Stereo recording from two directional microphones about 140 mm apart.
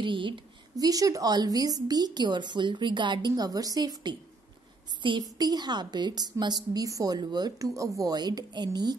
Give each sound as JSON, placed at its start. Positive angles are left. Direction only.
{"t": 0.0, "sound": "a woman's voice", "side_deg": -35}